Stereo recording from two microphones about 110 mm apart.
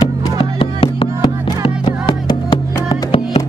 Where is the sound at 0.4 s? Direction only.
55° left (ahead or behind).